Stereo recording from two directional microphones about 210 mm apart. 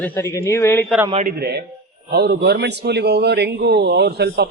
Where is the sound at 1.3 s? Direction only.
50° right (ahead or behind).